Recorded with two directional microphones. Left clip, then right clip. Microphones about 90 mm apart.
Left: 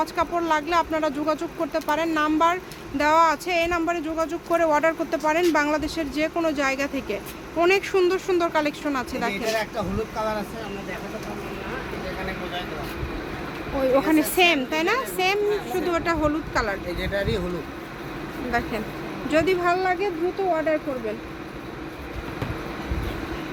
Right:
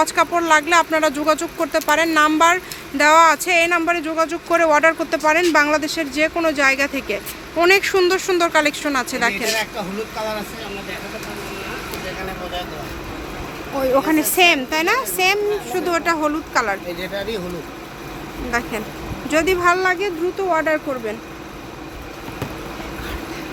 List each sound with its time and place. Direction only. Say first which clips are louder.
0.0 s speech: right 7 dB; 40° right (ahead or behind)
3.0 s speech: right 7 dB; 30° right (ahead or behind)
9.5 s speech: right 3 dB; 5° left (ahead or behind)
13.7 s speech: right 3 dB; 15° right (ahead or behind)
17.2 s speech: left 1 dB; 5° right (ahead or behind)
18.5 s speech: right 4 dB; 25° right (ahead or behind)
19.7 s speech: right 5 dB; 60° right (ahead or behind)